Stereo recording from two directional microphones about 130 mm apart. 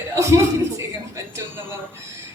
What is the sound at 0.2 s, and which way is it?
A man's voice, 20° right (ahead or behind).